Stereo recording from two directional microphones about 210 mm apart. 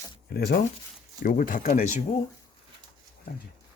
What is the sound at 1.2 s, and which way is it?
Speech, 40° left (ahead or behind).